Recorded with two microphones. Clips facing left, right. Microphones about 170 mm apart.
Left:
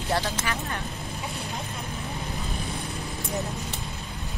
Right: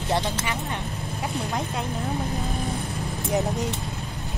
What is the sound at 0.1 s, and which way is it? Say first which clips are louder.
Speech: right 2 dB; 20° right (ahead or behind).